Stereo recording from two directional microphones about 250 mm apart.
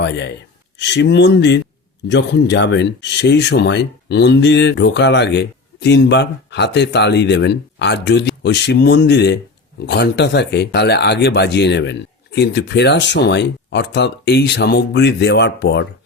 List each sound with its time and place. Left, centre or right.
0.8 s speech: left